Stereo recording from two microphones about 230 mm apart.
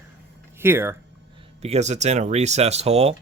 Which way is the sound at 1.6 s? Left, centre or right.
Right.